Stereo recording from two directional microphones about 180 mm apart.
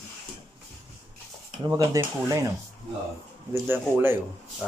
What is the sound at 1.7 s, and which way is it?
Speech, 20° right (ahead or behind).